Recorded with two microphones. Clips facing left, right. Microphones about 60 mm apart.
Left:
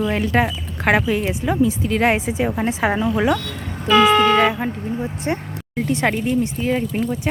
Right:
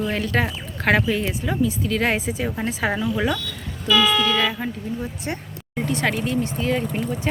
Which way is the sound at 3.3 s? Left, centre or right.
Left.